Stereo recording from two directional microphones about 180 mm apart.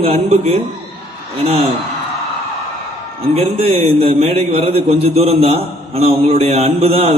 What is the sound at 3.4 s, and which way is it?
A man's voice, 30° right (ahead or behind).